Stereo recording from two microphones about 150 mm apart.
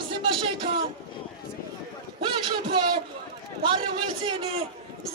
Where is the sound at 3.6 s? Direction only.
35° right (ahead or behind).